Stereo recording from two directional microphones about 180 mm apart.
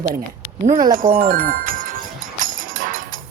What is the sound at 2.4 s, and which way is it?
Music, 50° right (ahead or behind).